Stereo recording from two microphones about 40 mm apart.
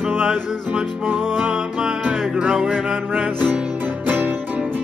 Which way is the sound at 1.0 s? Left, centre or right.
Right.